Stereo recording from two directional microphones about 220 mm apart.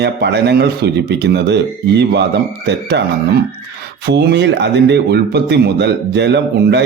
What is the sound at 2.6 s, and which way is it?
Speech, 50° right (ahead or behind).